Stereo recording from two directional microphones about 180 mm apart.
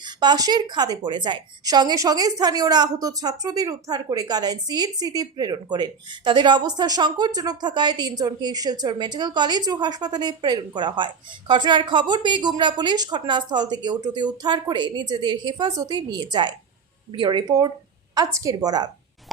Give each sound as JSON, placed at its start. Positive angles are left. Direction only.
{"t": 0.0, "sound": "a woman's voice", "side_deg": -25}